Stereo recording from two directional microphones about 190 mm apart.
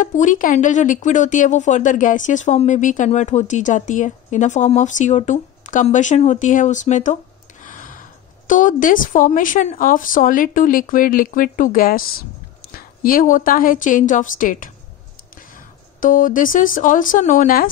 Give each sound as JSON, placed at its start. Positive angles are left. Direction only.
{"t": 0.0, "sound": "speech", "side_deg": 40}
{"t": 7.6, "sound": "gasp", "side_deg": 45}
{"t": 8.5, "sound": "speech", "side_deg": 45}
{"t": 16.0, "sound": "speech", "side_deg": 45}